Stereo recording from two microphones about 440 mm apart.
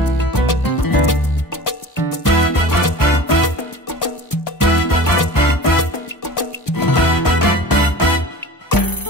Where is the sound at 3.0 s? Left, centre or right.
Left.